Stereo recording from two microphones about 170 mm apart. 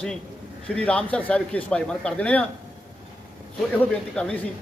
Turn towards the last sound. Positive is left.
turn(degrees=5)  # may be behind; listen again after turning